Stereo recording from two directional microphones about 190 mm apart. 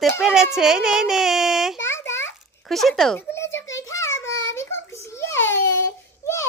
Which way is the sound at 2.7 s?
Centre (ahead or behind).